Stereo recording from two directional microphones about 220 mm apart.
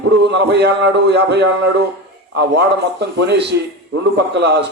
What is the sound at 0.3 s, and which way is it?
Speech, 50° right (ahead or behind).